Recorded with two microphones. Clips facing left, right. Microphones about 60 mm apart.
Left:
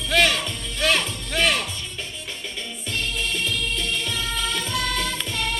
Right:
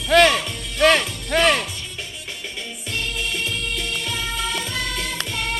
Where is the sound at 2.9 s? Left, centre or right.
Centre.